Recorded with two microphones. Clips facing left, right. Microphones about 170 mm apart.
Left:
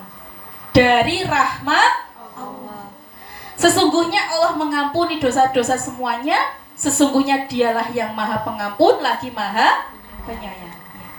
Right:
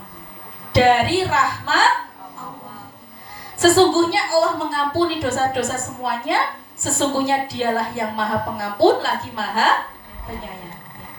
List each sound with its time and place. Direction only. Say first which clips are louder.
0.7 s a woman's voice: left 2 dB; 70° left (ahead or behind)
3.6 s a woman's voice: right 1 dB; 70° left (ahead or behind)